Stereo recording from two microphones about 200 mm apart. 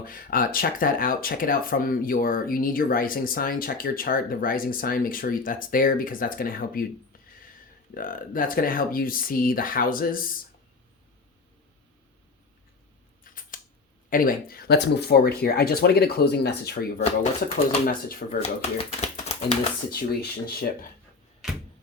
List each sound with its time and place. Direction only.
0.0 s speech: 45° left (ahead or behind)
7.9 s speech: 45° left (ahead or behind)
13.2 s scissors: 45° left (ahead or behind)
14.1 s speech: 45° left (ahead or behind)
17.8 s speech: 50° left (ahead or behind)
18.3 s speech: 30° left (ahead or behind)
19.9 s speech: 50° left (ahead or behind)